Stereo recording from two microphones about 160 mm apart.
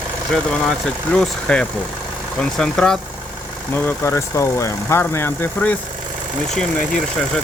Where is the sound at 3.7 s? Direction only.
15° left (ahead or behind).